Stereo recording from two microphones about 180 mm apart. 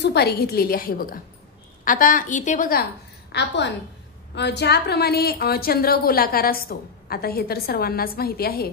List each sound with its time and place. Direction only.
0.0 s a woman's voice: 65° left (ahead or behind)